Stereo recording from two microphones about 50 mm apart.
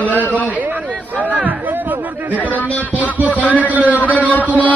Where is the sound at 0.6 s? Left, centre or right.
Right.